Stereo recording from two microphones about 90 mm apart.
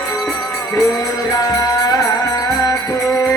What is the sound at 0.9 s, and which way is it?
Music, 40° left (ahead or behind).